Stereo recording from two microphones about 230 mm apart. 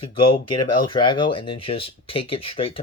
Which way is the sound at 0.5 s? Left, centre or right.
Centre.